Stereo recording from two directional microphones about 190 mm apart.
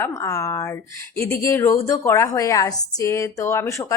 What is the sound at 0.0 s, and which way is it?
A woman's voice, 15° left (ahead or behind).